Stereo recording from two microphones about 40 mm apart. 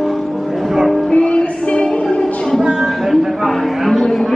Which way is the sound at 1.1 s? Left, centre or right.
Left.